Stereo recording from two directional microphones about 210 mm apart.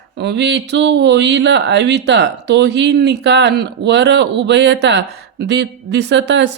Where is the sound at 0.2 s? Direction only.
55° right (ahead or behind).